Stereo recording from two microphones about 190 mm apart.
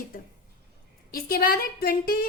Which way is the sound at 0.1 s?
45° left (ahead or behind).